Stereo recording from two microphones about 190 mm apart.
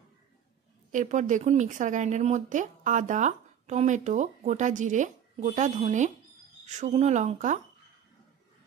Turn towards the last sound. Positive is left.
turn(degrees=-40)  # may be behind; listen again after turning